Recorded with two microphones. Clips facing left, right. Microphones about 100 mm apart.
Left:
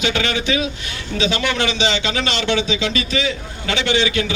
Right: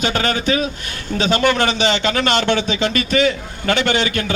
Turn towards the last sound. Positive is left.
turn(degrees=-50)  # may be behind; listen again after turning